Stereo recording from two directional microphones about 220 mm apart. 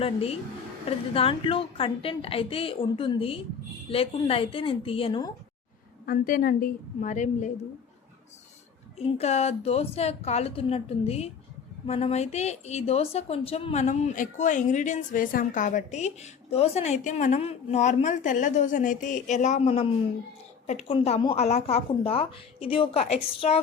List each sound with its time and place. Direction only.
0.0 s speech: 25° left (ahead or behind)
6.1 s speech: 40° left (ahead or behind)
9.0 s speech: 30° left (ahead or behind)